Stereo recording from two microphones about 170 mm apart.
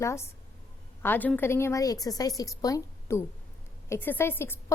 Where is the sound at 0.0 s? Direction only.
15° left (ahead or behind).